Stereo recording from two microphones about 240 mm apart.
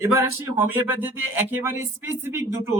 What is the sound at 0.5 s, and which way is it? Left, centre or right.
Speech, centre.